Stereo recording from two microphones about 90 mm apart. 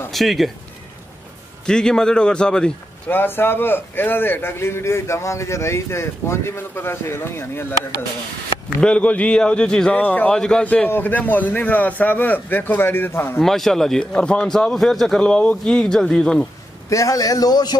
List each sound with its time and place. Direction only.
0.1 s speech: centre (ahead or behind)
1.7 s a man's voice: 10° left (ahead or behind)
3.1 s a man's voice: 25° left (ahead or behind)
8.8 s a man's voice: 15° left (ahead or behind)
13.4 s speech: 5° left (ahead or behind)
16.9 s speech: 40° left (ahead or behind)